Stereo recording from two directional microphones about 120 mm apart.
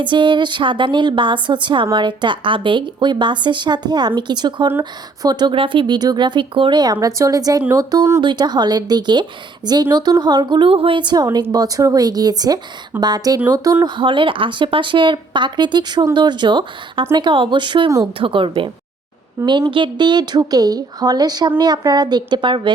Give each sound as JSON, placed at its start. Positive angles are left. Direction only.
{"t": 0.0, "sound": "a woman's voice", "side_deg": -40}
{"t": 8.2, "sound": "a woman's voice", "side_deg": -40}
{"t": 13.8, "sound": "a woman's voice", "side_deg": -40}